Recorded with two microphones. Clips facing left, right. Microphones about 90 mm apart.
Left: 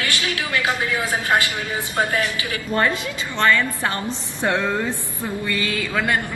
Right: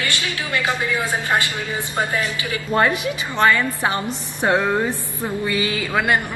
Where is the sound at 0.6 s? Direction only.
15° left (ahead or behind).